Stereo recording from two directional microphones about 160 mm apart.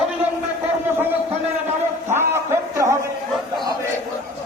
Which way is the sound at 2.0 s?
15° right (ahead or behind).